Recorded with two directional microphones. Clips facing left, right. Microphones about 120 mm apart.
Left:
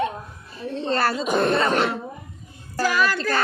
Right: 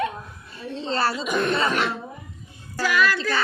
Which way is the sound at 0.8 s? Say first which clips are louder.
Left 2 dB; 55° left (ahead or behind).